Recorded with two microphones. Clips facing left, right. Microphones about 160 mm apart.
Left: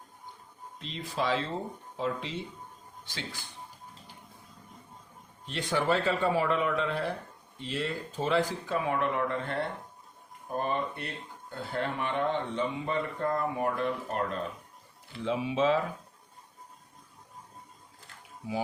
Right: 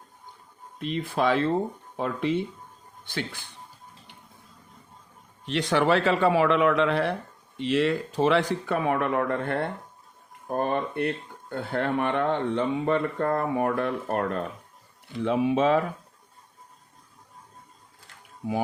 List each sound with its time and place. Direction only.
0.8 s speech: 55° right (ahead or behind)
5.5 s speech: 80° right; by 15.9 s 55° right (ahead or behind)